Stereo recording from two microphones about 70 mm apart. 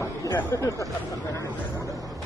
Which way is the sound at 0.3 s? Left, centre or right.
Left.